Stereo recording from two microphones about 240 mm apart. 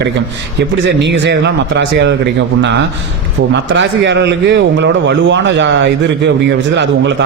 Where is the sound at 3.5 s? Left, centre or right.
Right.